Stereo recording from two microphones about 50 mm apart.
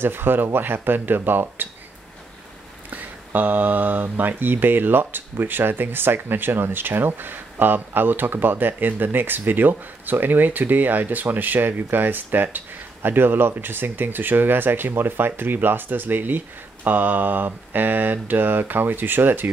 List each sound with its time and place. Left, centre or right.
0.0 s speech: right
2.9 s speech: right